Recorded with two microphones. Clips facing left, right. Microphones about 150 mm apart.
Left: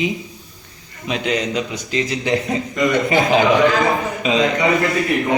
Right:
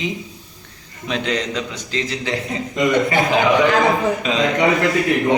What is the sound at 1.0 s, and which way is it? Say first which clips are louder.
A man's voice: left 1 dB; 10° left (ahead or behind).